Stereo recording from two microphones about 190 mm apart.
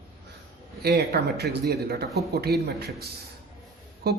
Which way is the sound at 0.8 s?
55° right (ahead or behind).